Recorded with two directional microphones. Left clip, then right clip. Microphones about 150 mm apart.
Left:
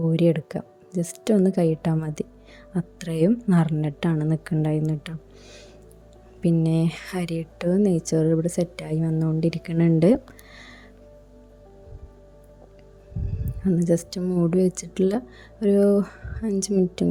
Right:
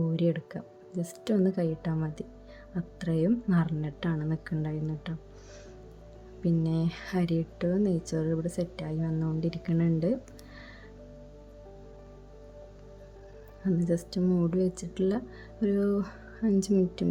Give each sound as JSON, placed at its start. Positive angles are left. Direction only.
{"t": 0.1, "sound": "speech", "side_deg": 45}
{"t": 6.4, "sound": "speech", "side_deg": 50}
{"t": 13.7, "sound": "speech", "side_deg": 50}